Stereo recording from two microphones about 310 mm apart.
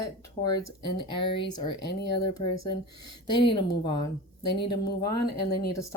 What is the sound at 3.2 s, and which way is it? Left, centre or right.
Speech, centre.